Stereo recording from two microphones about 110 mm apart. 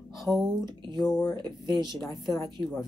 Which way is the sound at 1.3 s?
40° right (ahead or behind).